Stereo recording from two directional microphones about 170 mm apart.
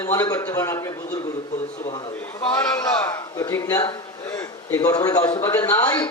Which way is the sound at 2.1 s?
15° left (ahead or behind).